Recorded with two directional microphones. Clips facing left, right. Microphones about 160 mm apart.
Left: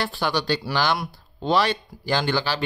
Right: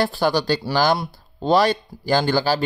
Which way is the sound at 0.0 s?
40° right (ahead or behind).